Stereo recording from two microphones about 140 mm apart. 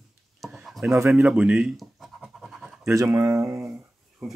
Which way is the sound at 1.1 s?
10° right (ahead or behind).